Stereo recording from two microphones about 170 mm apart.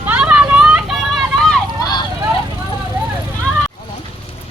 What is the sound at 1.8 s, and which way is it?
Vehicle, 25° left (ahead or behind).